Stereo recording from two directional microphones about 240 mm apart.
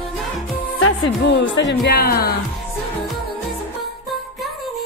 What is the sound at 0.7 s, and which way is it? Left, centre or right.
Speech, left.